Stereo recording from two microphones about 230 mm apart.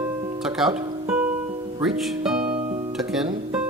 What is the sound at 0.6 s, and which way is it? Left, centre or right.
Speech, centre.